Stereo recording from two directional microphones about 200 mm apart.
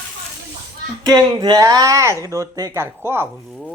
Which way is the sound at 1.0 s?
20° right (ahead or behind).